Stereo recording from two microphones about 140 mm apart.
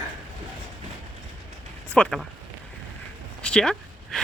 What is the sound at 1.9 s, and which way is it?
Speech, 10° left (ahead or behind).